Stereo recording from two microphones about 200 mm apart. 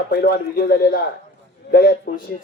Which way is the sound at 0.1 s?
50° left (ahead or behind).